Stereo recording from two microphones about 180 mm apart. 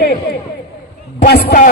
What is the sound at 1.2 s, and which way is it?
Speech, 50° left (ahead or behind).